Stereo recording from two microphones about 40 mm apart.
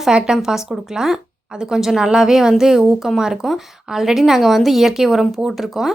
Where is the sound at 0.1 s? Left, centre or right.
Right.